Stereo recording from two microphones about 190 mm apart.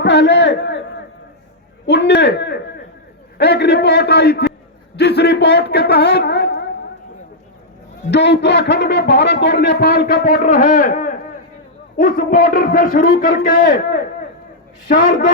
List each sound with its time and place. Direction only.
0.0 s a sound: 65° left (ahead or behind)
1.9 s a man's voice: 65° left (ahead or behind)
8.1 s a man's voice: 65° left (ahead or behind); by 15.3 s 45° left (ahead or behind)